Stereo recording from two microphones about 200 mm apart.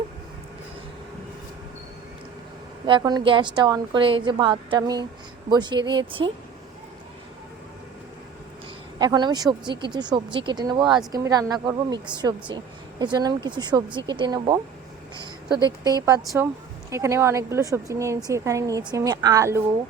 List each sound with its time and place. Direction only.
2.8 s speech: 20° right (ahead or behind)
9.0 s a woman's voice: 20° right (ahead or behind)